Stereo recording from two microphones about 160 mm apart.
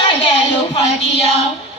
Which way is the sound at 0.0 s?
35° left (ahead or behind).